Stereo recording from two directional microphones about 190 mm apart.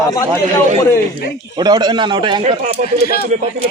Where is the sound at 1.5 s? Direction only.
20° right (ahead or behind); by 3.5 s 40° right (ahead or behind).